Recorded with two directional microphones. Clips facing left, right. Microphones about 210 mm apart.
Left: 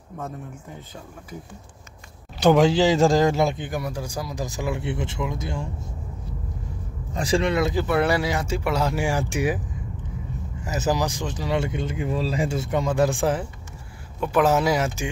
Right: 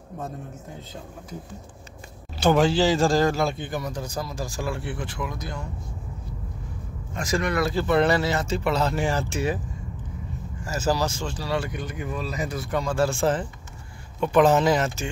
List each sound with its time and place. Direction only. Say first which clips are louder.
2.4 s a man's voice: left 3 dB; 20° left (ahead or behind)
7.2 s a man's voice: left 3 dB; 30° left (ahead or behind)
7.8 s speech: right 1 dB; 10° left (ahead or behind)
10.6 s a man's voice: left 1 dB; 20° left (ahead or behind)